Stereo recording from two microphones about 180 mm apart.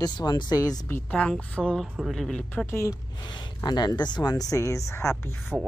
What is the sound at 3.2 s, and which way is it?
Speech, 25° left (ahead or behind).